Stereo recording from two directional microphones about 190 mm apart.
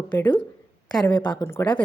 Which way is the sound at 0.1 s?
10° left (ahead or behind).